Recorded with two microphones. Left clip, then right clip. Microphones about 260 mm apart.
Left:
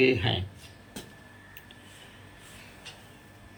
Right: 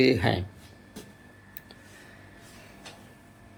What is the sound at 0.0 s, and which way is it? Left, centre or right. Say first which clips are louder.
Speech: right 1 dB; centre.